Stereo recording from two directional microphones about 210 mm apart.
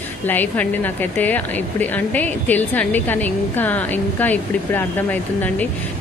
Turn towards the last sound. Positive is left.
turn(degrees=10)  # may be behind; listen again after turning